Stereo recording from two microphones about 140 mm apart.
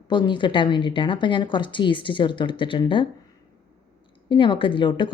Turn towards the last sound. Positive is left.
turn(degrees=35)  # may be behind; listen again after turning